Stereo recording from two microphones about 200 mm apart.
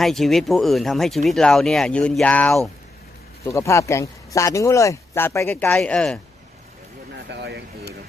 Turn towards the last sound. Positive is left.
turn(degrees=-55)  # may be behind; listen again after turning